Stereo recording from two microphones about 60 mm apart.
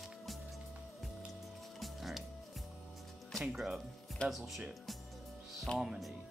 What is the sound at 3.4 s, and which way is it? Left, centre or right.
Speech, centre.